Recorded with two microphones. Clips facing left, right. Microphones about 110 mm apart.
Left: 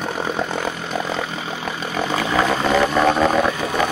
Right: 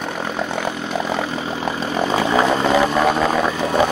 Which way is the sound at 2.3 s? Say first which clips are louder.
Right 1 dB; 15° right (ahead or behind).